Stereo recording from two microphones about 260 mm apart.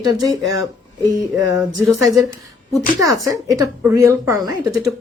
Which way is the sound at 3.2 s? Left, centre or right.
Centre.